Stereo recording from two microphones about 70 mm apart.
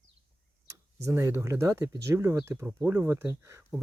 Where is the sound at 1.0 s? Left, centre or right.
Right.